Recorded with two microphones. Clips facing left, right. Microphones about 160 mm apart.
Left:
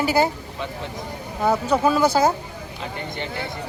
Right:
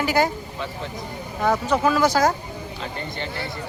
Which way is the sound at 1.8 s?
25° left (ahead or behind).